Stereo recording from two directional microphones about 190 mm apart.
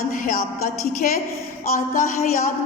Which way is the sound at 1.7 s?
45° left (ahead or behind).